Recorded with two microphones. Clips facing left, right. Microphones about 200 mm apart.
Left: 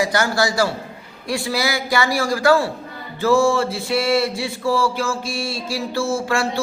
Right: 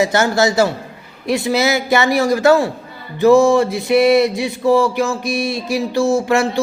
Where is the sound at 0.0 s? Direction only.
25° right (ahead or behind).